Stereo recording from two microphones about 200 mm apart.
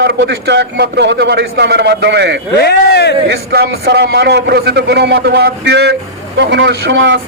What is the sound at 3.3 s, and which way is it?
A man's voice, 55° right (ahead or behind).